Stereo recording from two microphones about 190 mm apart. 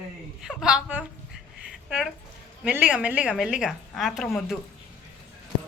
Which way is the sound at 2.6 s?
5° right (ahead or behind).